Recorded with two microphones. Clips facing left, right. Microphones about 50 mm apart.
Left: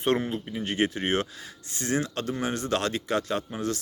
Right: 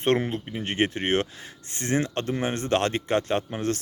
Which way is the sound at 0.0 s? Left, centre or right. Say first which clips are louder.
Right 2 dB; right.